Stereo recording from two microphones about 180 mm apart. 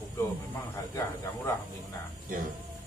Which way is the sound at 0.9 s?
15° left (ahead or behind).